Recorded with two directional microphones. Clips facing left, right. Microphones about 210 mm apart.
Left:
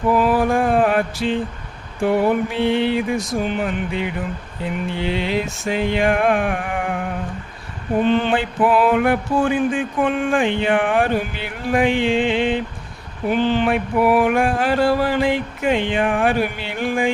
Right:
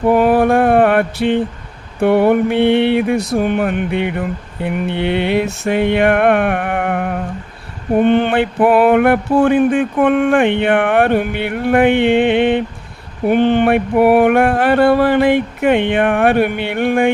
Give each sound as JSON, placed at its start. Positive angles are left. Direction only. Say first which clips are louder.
{"t": 0.0, "sound": "mantra", "louder": "right 5 dB", "side_deg": -60}